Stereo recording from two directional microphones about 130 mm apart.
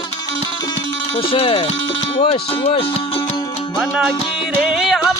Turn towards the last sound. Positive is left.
turn(degrees=-5)  # may be behind; listen again after turning